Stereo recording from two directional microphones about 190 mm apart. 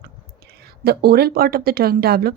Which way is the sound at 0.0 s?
60° right (ahead or behind).